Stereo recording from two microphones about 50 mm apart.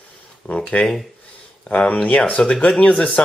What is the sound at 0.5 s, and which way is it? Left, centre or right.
Speech, left.